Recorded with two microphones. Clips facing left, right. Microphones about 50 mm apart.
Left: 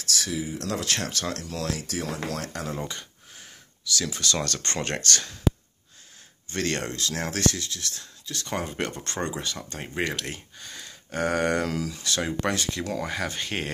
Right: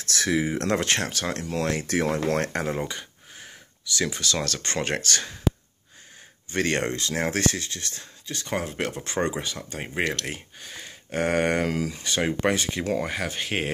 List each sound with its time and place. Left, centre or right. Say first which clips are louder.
0.4 s speech: right 6 dB; right
1.0 s speech: right 2 dB; centre
1.7 s speech: right 7 dB; right
2.0 s speech: right 7 dB; right
2.9 s a sound: right 2 dB; centre
4.1 s speech: even; centre
6.5 s speech: right 4 dB; centre
8.5 s speech: right 2 dB; centre